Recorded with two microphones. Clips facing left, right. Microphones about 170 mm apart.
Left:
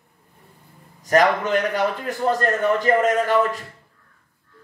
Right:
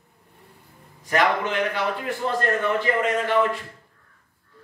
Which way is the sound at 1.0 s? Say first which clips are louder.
Left 4 dB; 40° left (ahead or behind).